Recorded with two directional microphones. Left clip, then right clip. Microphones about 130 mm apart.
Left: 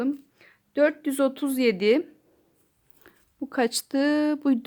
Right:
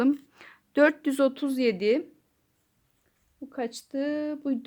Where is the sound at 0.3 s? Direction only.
30° right (ahead or behind).